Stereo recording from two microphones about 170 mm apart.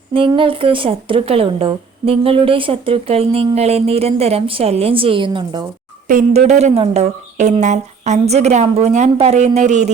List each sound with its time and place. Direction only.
0.1 s speech: 30° right (ahead or behind)
6.1 s speech: 45° right (ahead or behind)